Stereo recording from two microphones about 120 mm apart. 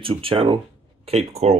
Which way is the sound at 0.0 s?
50° right (ahead or behind).